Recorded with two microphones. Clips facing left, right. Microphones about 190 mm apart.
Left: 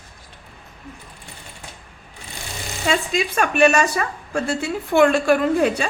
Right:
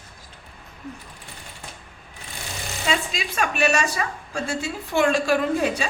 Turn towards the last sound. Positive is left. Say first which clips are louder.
# left 4 dB
turn(degrees=55)  # may be behind; listen again after turning